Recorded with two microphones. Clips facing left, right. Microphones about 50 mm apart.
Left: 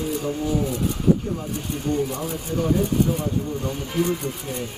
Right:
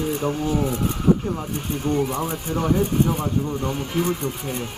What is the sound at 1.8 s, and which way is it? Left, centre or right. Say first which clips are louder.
Speech: right 2 dB; right.